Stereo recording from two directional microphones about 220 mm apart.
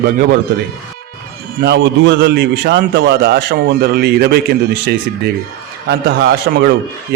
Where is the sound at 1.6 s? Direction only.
50° right (ahead or behind).